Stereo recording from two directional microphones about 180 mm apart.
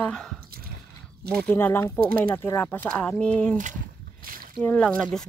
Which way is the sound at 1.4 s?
10° left (ahead or behind).